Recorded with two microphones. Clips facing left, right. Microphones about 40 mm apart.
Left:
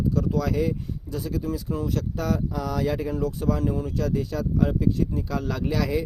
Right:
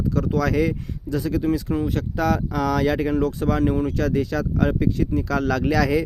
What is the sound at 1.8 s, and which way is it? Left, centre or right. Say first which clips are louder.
Speech: right 4 dB; right.